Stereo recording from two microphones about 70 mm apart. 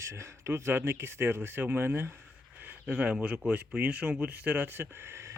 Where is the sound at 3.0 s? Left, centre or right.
Centre.